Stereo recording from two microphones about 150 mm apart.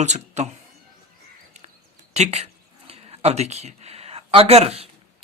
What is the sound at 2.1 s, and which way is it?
Speech, 45° right (ahead or behind).